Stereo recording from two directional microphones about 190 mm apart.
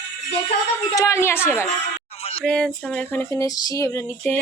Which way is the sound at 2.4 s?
5° left (ahead or behind).